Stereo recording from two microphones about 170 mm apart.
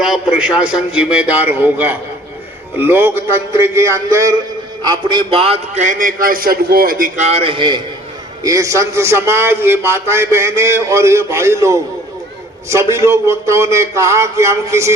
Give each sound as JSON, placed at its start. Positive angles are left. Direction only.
{"t": 0.0, "sound": "a man's voice", "side_deg": -5}
{"t": 5.8, "sound": "a man's voice", "side_deg": -50}
{"t": 7.3, "sound": "a man's voice", "side_deg": -35}